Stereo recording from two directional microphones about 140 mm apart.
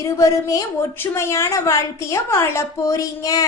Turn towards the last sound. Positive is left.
turn(degrees=25)  # may be behind; listen again after turning